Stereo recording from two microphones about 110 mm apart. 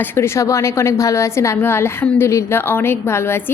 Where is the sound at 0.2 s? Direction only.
30° left (ahead or behind).